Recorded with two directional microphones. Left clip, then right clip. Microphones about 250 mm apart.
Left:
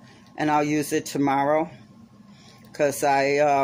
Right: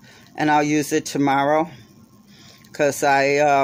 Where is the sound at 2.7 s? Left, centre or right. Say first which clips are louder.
Right 3 dB; right.